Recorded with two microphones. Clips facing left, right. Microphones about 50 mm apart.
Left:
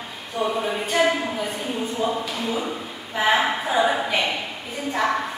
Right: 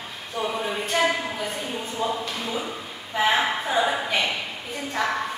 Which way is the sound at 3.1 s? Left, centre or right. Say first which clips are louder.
Left 2 dB; centre.